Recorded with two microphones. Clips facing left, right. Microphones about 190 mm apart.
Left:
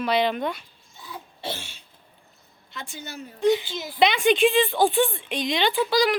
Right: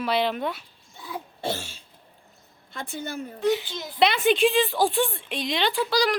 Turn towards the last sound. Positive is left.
turn(degrees=0)  # may be behind; listen again after turning